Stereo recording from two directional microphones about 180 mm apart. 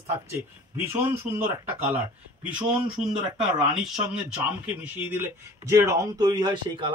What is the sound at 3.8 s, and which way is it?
Speech, 5° right (ahead or behind).